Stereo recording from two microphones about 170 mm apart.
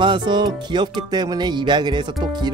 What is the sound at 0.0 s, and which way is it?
Speech, 25° right (ahead or behind).